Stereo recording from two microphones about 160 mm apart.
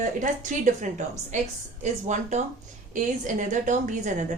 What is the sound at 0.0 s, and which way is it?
A woman's voice, 50° right (ahead or behind).